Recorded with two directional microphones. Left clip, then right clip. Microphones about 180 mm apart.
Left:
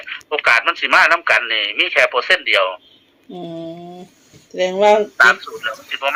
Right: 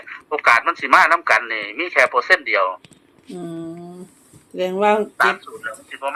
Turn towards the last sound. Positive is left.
turn(degrees=5)  # may be behind; listen again after turning